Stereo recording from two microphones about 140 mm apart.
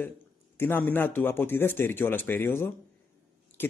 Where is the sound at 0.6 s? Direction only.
15° left (ahead or behind).